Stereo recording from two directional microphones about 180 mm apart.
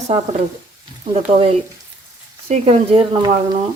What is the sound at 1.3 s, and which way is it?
Speech, 30° right (ahead or behind).